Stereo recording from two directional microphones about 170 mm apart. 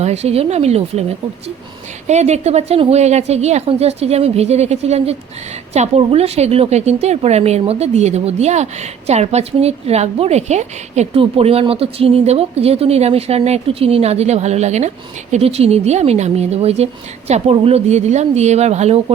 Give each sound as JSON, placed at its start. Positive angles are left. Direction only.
{"t": 0.0, "sound": "a woman's voice", "side_deg": -40}